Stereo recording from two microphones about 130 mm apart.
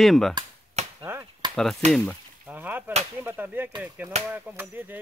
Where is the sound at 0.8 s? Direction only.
55° right (ahead or behind).